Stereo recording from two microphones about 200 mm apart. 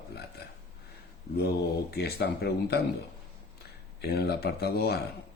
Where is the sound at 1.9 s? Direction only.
55° left (ahead or behind).